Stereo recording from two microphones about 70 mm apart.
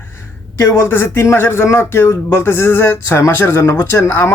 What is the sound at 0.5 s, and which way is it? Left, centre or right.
Speech, left.